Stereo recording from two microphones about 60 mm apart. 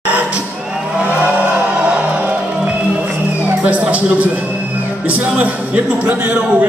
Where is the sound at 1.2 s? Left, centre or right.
Right.